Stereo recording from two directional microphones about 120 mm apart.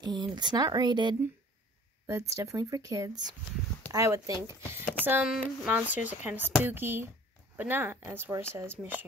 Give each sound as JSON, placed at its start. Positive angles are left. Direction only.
{"t": 0.0, "sound": "speech", "side_deg": -40}
{"t": 2.0, "sound": "speech", "side_deg": -25}